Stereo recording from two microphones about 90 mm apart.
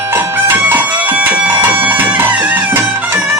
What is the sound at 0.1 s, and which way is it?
Music, 25° right (ahead or behind).